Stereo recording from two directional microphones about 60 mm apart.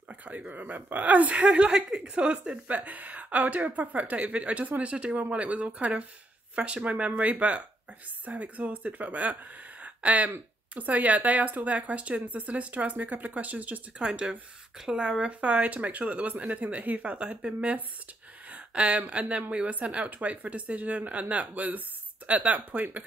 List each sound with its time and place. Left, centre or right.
0.1 s a woman's voice: right
13.9 s a woman's voice: centre